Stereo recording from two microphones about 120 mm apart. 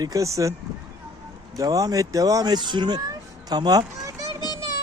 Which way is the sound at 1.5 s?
30° right (ahead or behind).